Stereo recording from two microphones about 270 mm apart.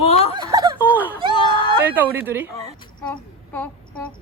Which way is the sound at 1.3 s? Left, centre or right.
Centre.